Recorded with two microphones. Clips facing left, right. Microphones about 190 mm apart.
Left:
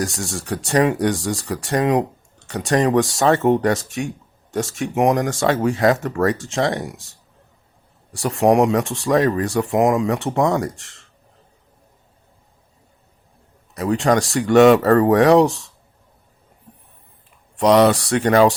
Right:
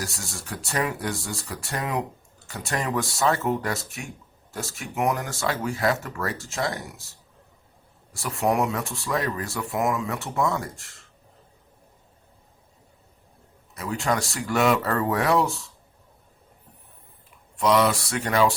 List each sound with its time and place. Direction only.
0.0 s speech: 85° left
8.1 s speech: 80° left
13.7 s speech: 75° left (ahead or behind)
14.8 s speech: 70° left (ahead or behind)
15.1 s speech: 80° left
17.6 s speech: 70° left (ahead or behind)